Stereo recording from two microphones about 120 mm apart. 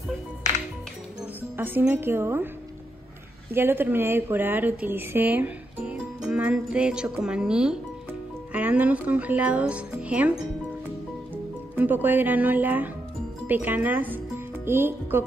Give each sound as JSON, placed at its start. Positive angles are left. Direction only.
{"t": 1.6, "sound": "a woman's voice", "side_deg": -15}
{"t": 3.5, "sound": "a woman's voice", "side_deg": -20}
{"t": 11.7, "sound": "a woman's voice", "side_deg": -15}